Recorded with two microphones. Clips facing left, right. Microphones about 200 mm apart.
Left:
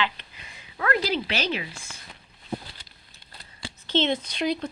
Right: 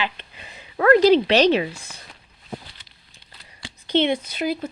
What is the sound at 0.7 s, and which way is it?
A woman's voice, 45° right (ahead or behind).